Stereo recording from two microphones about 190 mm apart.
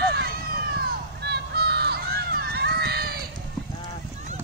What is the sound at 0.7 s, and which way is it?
Crowd, 60° right (ahead or behind).